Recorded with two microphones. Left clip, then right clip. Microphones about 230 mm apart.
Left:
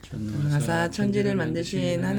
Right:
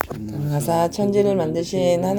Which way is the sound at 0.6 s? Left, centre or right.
Centre.